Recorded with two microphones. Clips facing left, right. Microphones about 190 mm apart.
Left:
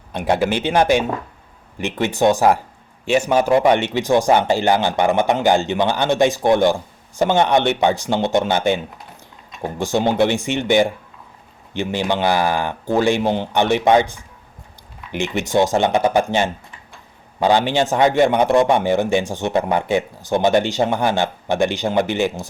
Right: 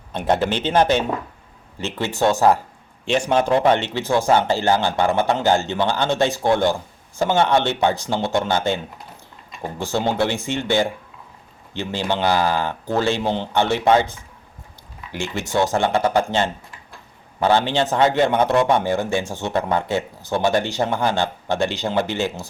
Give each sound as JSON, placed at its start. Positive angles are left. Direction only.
{"t": 0.1, "sound": "a man's voice", "side_deg": 10}